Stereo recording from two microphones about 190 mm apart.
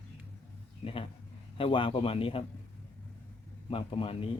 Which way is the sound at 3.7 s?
30° left (ahead or behind).